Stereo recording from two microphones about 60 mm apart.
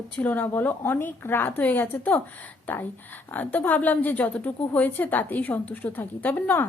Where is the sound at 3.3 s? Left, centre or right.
Left.